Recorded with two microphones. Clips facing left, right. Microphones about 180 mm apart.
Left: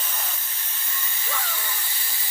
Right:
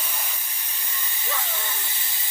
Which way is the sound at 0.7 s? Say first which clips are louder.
Left 1 dB; 15° right (ahead or behind).